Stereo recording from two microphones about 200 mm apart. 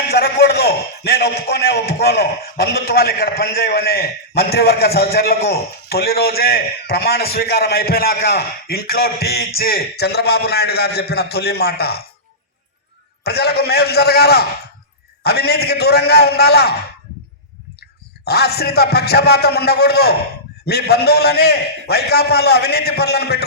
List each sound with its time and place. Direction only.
0.1 s a man's voice: 55° left (ahead or behind)
13.2 s a man's voice: 50° left (ahead or behind)
18.3 s a man's voice: 50° left (ahead or behind)